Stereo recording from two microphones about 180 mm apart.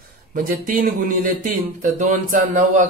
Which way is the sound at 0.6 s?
50° right (ahead or behind).